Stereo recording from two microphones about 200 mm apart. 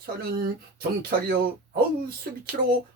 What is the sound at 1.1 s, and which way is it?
Speech, 50° right (ahead or behind).